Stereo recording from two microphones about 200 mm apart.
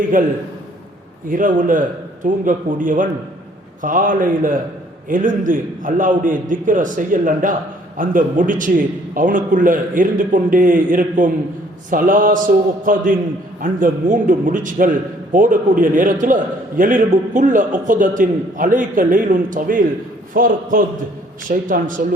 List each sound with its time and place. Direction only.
0.1 s a man's voice: 40° right (ahead or behind)
1.3 s a man's voice: 40° right (ahead or behind)